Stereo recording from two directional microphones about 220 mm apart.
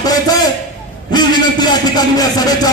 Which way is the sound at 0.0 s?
15° left (ahead or behind).